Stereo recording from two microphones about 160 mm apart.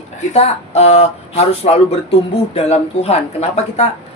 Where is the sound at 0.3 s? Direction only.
40° left (ahead or behind).